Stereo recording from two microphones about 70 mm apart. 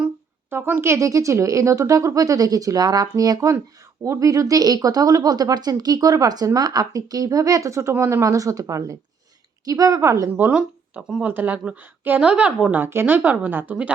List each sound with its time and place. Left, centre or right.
0.8 s a woman's voice: right
4.0 s speech: right
8.2 s a woman's voice: right
11.2 s speech: right
12.2 s speech: centre
12.7 s speech: right